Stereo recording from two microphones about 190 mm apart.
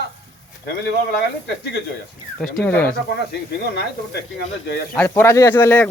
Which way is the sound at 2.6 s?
10° left (ahead or behind).